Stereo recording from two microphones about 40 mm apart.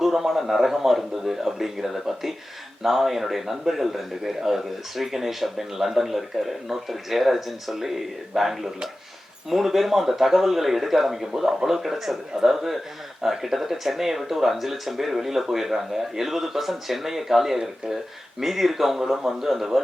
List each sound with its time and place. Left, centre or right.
0.0 s speech: centre